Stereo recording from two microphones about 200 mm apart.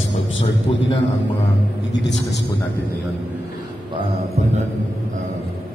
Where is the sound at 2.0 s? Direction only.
60° left (ahead or behind).